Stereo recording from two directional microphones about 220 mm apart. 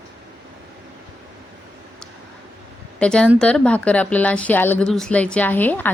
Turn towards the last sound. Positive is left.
turn(degrees=10)  # may be behind; listen again after turning